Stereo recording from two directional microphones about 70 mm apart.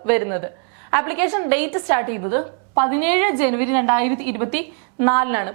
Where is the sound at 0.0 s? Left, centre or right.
Right.